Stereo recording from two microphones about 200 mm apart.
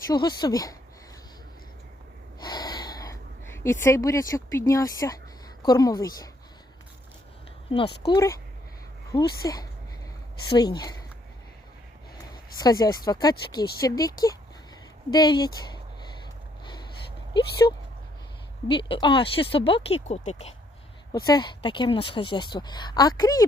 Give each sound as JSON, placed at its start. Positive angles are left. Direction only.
{"t": 0.1, "sound": "speech", "side_deg": 20}
{"t": 2.4, "sound": "a sound", "side_deg": 20}
{"t": 5.6, "sound": "speech", "side_deg": 20}
{"t": 8.1, "sound": "speech", "side_deg": 15}
{"t": 12.5, "sound": "speech", "side_deg": 20}
{"t": 17.3, "sound": "speech", "side_deg": 20}